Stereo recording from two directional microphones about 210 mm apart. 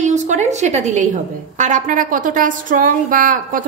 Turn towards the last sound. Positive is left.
turn(degrees=-40)  # may be behind; listen again after turning